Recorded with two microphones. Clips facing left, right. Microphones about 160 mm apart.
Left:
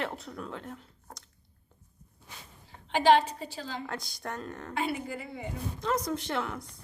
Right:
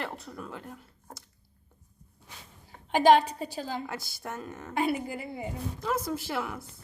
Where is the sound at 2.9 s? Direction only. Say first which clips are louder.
Right 2 dB; 45° right (ahead or behind).